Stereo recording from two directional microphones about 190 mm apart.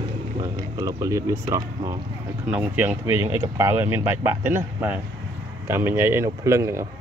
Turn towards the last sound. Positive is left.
turn(degrees=-15)  # may be behind; listen again after turning